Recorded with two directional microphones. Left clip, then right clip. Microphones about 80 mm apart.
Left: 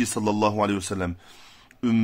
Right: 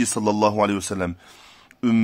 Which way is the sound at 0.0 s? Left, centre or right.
Right.